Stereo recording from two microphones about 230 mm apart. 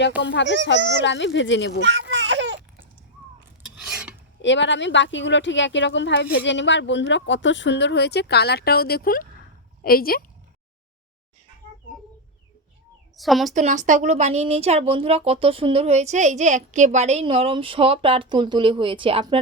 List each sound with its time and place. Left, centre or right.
0.2 s speech: left
0.8 s speech: right
1.0 s speech: left
1.8 s baby cry: right
3.8 s filing: centre
4.4 s speech: left
13.1 s a child's voice: centre
13.5 s a woman's voice: right